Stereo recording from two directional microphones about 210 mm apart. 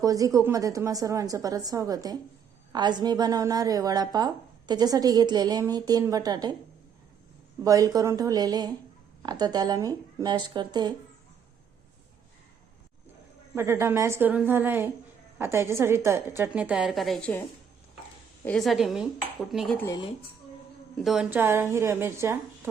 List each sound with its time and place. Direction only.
0.0 s a woman's voice: 15° right (ahead or behind)
7.6 s a woman's voice: 15° right (ahead or behind)
13.6 s a woman's voice: 10° right (ahead or behind); by 17.4 s 5° left (ahead or behind)
18.4 s dishes: centre (ahead or behind)
20.9 s a woman's voice: centre (ahead or behind)